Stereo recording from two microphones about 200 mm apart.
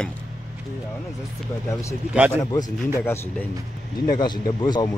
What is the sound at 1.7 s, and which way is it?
Speech, 15° left (ahead or behind).